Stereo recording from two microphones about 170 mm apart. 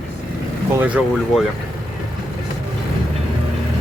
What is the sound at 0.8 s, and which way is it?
Speech, 5° right (ahead or behind).